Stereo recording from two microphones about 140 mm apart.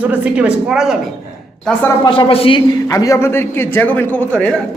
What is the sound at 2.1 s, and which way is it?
Speech, 40° left (ahead or behind).